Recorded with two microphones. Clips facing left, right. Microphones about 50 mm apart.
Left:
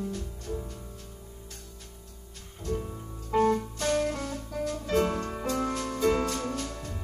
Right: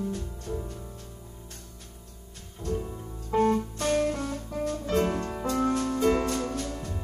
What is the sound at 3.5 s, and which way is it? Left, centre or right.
Music, right.